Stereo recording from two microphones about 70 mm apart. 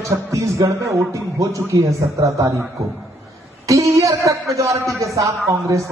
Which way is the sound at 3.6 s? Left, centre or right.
Right.